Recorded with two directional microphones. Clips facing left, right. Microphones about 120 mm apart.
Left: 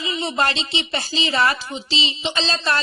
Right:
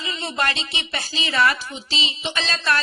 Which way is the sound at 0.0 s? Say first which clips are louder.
Left 3 dB; 15° left (ahead or behind).